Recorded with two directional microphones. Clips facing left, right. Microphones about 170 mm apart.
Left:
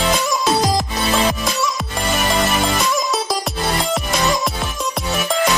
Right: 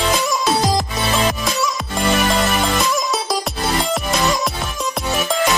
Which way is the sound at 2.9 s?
Centre (ahead or behind).